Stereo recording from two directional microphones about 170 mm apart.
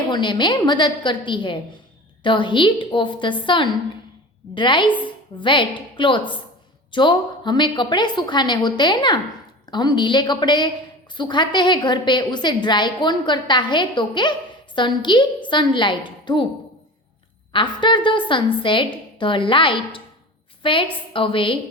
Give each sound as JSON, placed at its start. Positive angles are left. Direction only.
{"t": 0.1, "sound": "a woman's voice", "side_deg": 25}
{"t": 17.5, "sound": "a woman's voice", "side_deg": 30}